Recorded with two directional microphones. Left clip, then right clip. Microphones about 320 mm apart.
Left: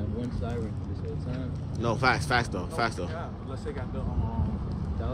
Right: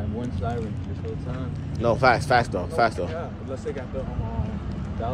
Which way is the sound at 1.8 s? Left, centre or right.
Centre.